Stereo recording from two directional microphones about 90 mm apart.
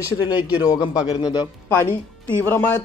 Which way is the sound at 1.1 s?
55° left (ahead or behind).